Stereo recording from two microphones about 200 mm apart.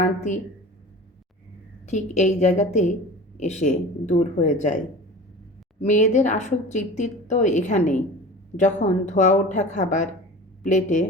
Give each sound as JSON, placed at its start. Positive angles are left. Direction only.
{"t": 0.3, "sound": "a woman's voice", "side_deg": 35}
{"t": 1.9, "sound": "a woman's voice", "side_deg": 35}
{"t": 5.8, "sound": "a woman's voice", "side_deg": 35}